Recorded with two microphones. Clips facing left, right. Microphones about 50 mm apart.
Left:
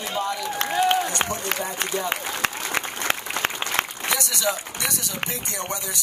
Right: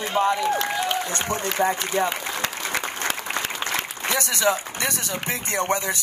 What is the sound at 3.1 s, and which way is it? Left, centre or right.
Applause, left.